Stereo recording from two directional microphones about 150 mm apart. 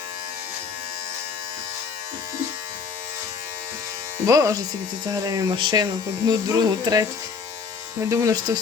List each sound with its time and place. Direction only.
4.3 s speech: 25° right (ahead or behind)
8.1 s speech: 25° right (ahead or behind)